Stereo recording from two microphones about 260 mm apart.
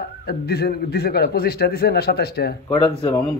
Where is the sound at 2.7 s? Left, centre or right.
Left.